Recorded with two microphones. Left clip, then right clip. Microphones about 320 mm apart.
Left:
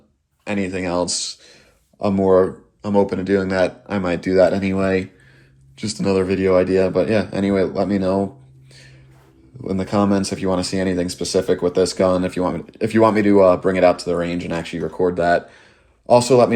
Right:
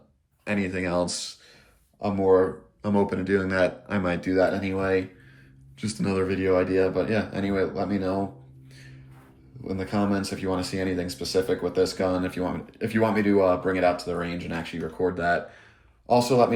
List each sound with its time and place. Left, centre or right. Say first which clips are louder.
0.4 s a man's voice: left 5 dB; centre
2.8 s speech: left 7 dB; centre
9.6 s a man's voice: left 8 dB; centre